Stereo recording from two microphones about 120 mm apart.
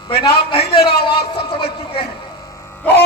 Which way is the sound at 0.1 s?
45° left (ahead or behind).